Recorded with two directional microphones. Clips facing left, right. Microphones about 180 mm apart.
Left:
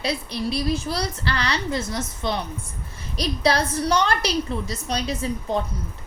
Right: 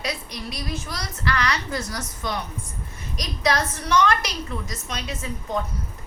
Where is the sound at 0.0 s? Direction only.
30° left (ahead or behind).